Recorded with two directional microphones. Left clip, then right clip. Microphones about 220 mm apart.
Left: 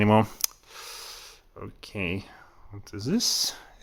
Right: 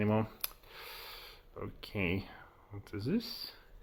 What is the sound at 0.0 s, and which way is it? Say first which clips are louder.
Speech: left 12 dB; 40° left (ahead or behind).